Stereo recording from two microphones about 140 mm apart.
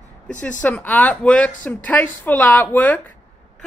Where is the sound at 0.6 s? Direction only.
10° left (ahead or behind).